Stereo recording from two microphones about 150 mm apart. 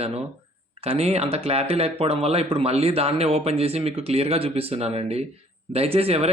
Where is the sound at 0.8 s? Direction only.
40° right (ahead or behind).